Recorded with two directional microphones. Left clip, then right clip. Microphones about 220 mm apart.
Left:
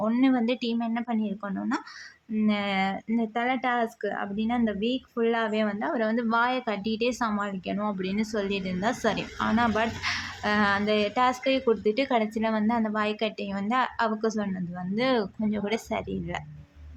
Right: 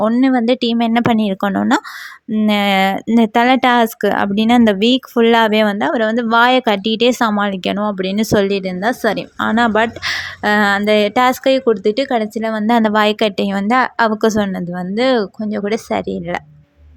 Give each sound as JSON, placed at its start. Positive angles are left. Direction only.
{"t": 0.0, "sound": "speech", "side_deg": -30}